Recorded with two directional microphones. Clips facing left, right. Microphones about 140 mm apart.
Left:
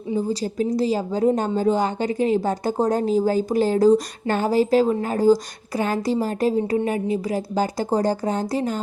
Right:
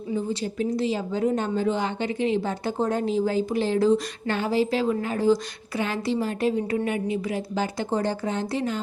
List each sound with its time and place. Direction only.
0.2 s a woman's voice: 35° left (ahead or behind)